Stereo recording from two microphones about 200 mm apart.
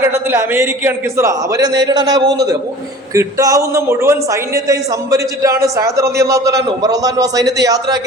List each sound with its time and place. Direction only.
0.3 s a man's voice: 10° right (ahead or behind)